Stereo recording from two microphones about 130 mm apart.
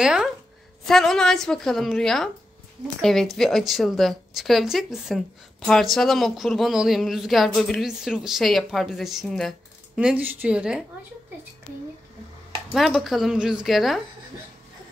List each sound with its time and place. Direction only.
0.0 s speech: 5° right (ahead or behind)
9.9 s a woman's voice: 10° right (ahead or behind)
12.7 s speech: centre (ahead or behind)